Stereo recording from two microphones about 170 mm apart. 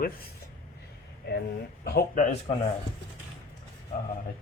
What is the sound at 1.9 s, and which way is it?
Speech, 65° left (ahead or behind).